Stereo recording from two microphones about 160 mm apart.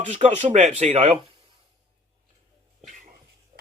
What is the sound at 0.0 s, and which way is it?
Speech, 45° right (ahead or behind).